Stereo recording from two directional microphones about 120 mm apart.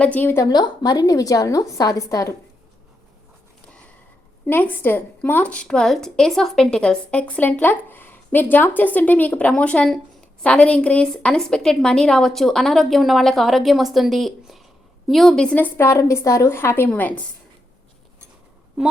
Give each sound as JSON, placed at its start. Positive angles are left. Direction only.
{"t": 0.0, "sound": "a woman's voice", "side_deg": 15}
{"t": 0.4, "sound": "a woman's voice", "side_deg": 35}
{"t": 4.4, "sound": "a woman's voice", "side_deg": 15}